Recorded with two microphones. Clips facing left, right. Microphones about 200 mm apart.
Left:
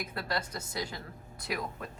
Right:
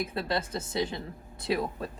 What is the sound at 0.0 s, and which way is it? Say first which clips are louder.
A woman's voice: right 5 dB; 25° right (ahead or behind).